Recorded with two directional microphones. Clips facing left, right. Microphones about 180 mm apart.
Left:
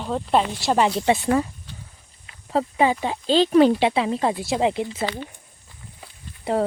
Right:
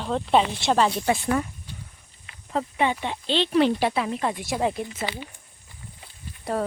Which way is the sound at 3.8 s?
25° left (ahead or behind).